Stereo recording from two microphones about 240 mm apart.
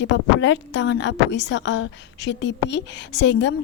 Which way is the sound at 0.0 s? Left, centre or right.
Left.